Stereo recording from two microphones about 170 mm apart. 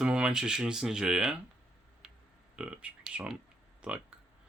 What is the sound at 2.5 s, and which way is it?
Speech, 5° right (ahead or behind).